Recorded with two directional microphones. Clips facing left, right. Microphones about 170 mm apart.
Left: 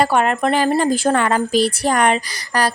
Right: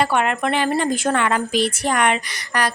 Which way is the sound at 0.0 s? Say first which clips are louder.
Left 3 dB; 40° left (ahead or behind).